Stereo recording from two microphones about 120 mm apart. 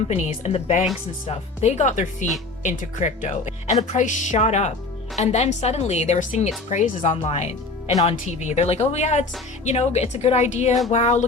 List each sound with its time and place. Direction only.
0.1 s a woman's voice: 60° left (ahead or behind)
8.0 s a woman's voice: 75° left (ahead or behind)